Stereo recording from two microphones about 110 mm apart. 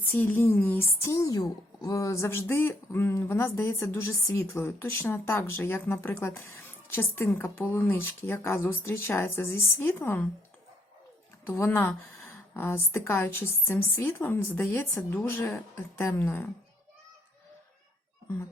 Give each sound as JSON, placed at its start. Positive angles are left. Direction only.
{"t": 0.1, "sound": "speech", "side_deg": 20}
{"t": 11.4, "sound": "speech", "side_deg": 20}